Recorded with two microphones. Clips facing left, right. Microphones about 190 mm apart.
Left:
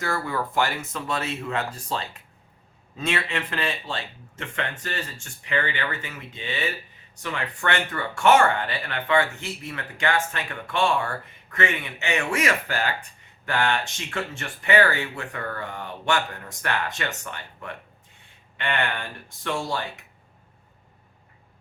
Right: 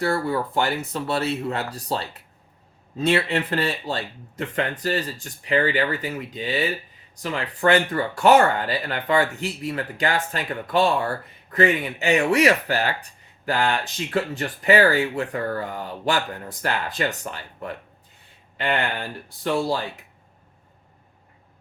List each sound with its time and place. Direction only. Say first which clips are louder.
0.0 s speech: right 5 dB; 30° right (ahead or behind)